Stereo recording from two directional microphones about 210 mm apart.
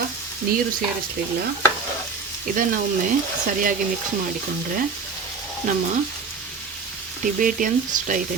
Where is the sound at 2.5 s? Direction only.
40° right (ahead or behind).